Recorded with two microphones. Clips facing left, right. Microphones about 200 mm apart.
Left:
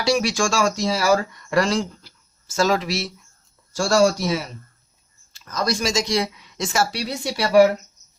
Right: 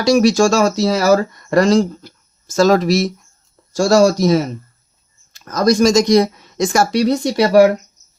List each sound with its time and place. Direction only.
0.0 s speech: 40° right (ahead or behind)